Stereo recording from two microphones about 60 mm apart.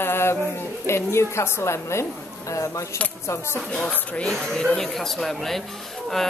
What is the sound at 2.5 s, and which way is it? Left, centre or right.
Speech, left.